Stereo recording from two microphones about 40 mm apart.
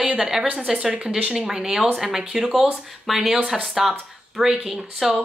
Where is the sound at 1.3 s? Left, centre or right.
Centre.